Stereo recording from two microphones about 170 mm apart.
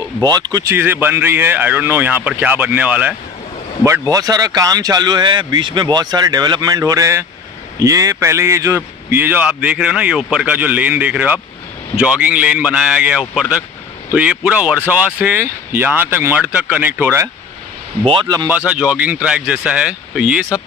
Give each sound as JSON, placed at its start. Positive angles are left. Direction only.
{"t": 0.2, "sound": "a man's voice", "side_deg": -25}
{"t": 18.0, "sound": "speech", "side_deg": -25}
{"t": 18.7, "sound": "a man's voice", "side_deg": -10}